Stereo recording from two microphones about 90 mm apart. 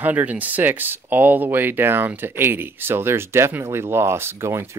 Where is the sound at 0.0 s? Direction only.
20° right (ahead or behind).